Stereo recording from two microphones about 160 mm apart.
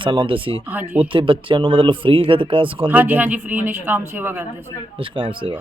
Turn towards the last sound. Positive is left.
turn(degrees=-30)  # may be behind; listen again after turning